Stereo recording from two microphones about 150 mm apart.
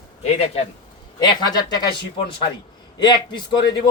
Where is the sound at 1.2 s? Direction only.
25° left (ahead or behind).